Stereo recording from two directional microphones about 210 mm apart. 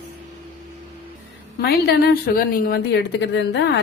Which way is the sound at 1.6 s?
50° left (ahead or behind).